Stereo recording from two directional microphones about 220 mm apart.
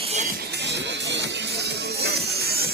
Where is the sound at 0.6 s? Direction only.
50° right (ahead or behind).